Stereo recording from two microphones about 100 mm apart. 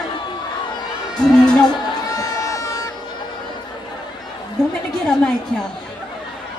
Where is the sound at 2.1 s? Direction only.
35° left (ahead or behind).